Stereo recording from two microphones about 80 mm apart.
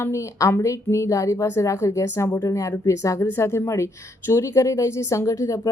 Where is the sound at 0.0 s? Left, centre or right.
Left.